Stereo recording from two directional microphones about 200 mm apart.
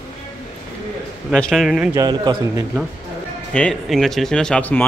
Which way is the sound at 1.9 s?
20° right (ahead or behind).